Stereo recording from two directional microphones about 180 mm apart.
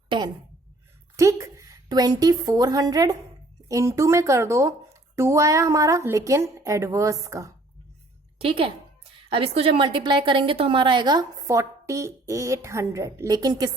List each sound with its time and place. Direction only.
1.1 s a woman's voice: 15° right (ahead or behind)
8.4 s a woman's voice: 30° right (ahead or behind)